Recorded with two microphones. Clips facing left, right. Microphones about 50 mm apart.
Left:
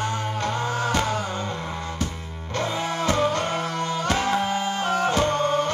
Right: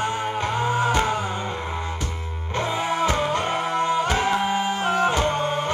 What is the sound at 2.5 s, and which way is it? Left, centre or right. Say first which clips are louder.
Music: right 2 dB; centre.